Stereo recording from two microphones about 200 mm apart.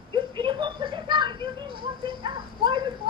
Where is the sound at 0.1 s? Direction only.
25° right (ahead or behind).